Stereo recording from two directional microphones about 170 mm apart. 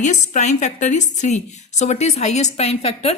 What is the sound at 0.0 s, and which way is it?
A woman's voice, 45° left (ahead or behind).